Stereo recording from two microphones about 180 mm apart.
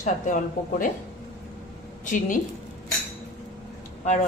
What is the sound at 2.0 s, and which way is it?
Speech, 45° left (ahead or behind).